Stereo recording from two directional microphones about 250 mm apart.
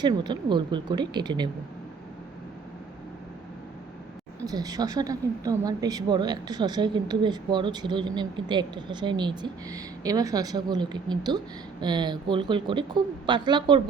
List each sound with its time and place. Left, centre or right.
0.0 s a woman's voice: centre
4.4 s a woman's voice: centre